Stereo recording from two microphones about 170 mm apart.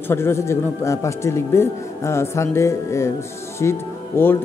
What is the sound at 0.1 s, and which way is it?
A man's voice, 15° left (ahead or behind).